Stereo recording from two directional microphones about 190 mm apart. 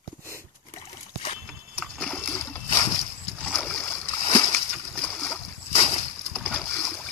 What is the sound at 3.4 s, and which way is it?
Boat, 5° left (ahead or behind).